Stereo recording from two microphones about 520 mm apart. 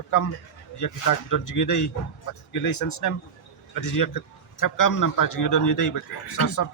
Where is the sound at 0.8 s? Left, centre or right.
Left.